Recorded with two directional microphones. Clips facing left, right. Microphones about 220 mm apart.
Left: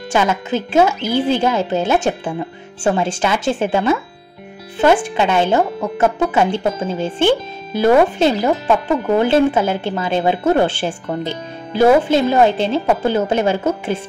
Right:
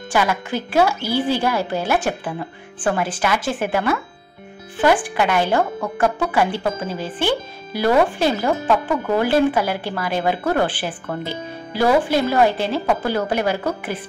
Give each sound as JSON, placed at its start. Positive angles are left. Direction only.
{"t": 0.1, "sound": "speech", "side_deg": 25}